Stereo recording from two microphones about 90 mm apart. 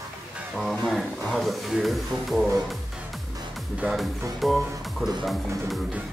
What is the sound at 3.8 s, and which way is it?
Speech, centre (ahead or behind).